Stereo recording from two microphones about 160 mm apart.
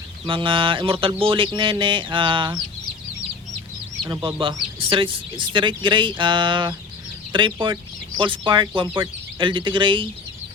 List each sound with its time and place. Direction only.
0.3 s speech: 35° right (ahead or behind)
4.0 s speech: 25° right (ahead or behind)